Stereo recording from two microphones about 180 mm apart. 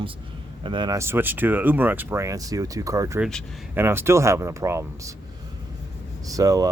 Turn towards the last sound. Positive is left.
turn(degrees=-20)  # may be behind; listen again after turning